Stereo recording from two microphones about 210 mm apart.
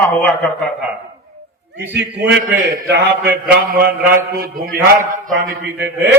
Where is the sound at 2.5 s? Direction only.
55° right (ahead or behind).